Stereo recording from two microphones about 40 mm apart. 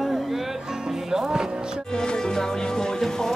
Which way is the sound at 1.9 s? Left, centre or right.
Centre.